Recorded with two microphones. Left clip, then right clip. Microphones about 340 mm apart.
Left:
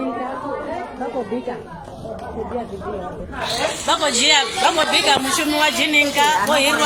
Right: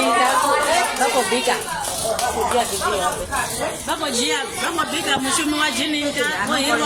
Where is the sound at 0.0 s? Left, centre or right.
Right.